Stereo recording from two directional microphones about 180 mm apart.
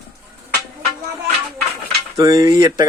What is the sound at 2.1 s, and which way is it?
Speech, 20° right (ahead or behind).